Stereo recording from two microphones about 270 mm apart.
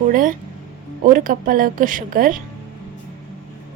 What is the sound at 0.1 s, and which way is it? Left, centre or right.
Speech, right.